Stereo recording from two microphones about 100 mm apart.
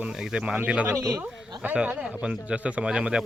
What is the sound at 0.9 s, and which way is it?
Speech, 35° right (ahead or behind).